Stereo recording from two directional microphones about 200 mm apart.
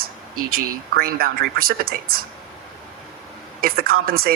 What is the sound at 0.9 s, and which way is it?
Speech, 50° right (ahead or behind).